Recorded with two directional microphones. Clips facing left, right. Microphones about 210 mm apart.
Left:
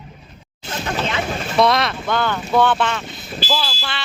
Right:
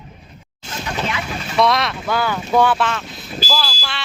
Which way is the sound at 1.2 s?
50° left (ahead or behind).